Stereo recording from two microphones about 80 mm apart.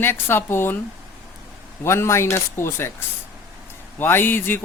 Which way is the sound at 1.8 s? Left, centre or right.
Left.